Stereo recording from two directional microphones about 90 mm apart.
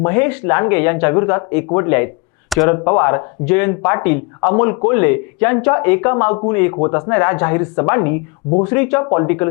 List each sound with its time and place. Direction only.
0.0 s speech: 20° left (ahead or behind)